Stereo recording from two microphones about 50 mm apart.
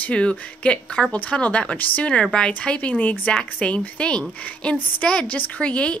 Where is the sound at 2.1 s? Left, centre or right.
Centre.